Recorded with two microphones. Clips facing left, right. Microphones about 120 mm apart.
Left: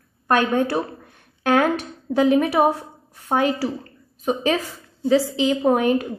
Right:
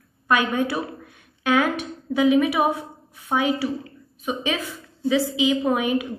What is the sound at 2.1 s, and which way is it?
A woman's voice, 50° left (ahead or behind).